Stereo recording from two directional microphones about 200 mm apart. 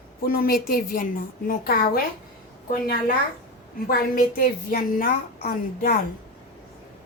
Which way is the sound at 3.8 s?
45° left (ahead or behind).